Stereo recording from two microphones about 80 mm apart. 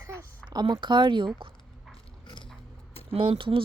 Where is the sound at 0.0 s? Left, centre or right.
Right.